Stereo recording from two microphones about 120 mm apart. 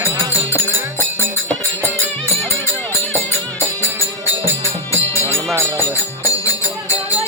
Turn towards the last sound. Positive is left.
turn(degrees=20)  # may be behind; listen again after turning